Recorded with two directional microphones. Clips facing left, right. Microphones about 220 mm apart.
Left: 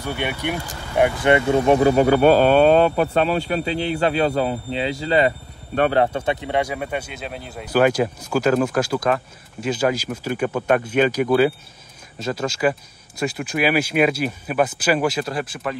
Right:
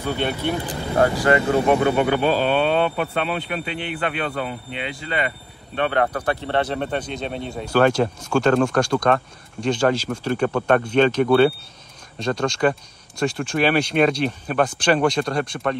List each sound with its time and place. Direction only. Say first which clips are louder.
0.0 s speech: right 2 dB; 15° left (ahead or behind); by 6.0 s 35° left (ahead or behind)
6.0 s speech: left 1 dB; 25° left (ahead or behind); by 11.1 s 5° left (ahead or behind)
12.2 s speech: right 2 dB; 5° left (ahead or behind)